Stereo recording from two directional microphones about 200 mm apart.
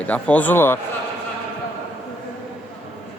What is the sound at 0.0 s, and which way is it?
Speech, 5° left (ahead or behind).